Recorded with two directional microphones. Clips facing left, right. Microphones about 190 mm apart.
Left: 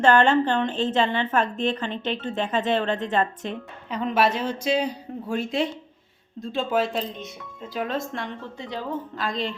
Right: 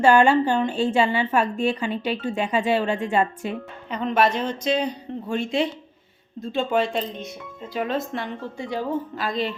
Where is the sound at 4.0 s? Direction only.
5° left (ahead or behind).